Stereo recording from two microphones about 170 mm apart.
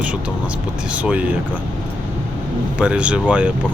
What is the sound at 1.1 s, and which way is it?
Speech, 10° right (ahead or behind).